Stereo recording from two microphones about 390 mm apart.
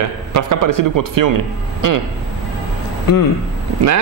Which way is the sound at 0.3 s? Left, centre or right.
Right.